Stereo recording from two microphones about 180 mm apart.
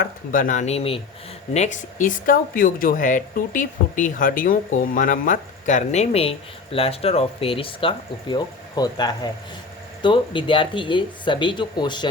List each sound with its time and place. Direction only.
0.0 s speech: 50° left (ahead or behind); by 12.0 s 25° left (ahead or behind)